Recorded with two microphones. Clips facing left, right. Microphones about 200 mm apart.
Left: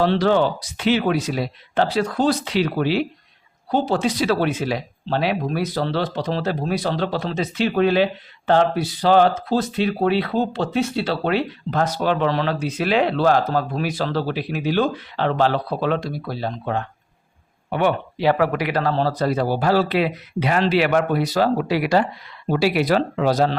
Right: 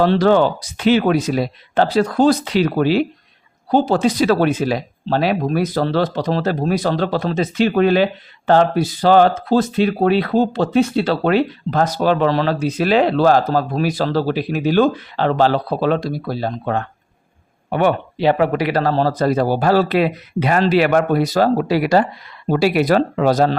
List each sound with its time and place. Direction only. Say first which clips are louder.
0.0 s speech: right 4 dB; 45° right (ahead or behind)
18.2 s speech: right 3 dB; 25° right (ahead or behind); by 23.6 s 45° right (ahead or behind)